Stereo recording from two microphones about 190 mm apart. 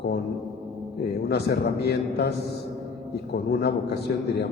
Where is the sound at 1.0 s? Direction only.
55° left (ahead or behind).